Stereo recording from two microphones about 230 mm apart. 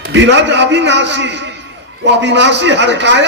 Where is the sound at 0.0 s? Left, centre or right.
Right.